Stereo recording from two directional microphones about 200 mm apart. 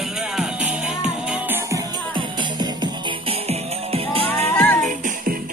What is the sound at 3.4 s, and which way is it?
Music, 30° right (ahead or behind).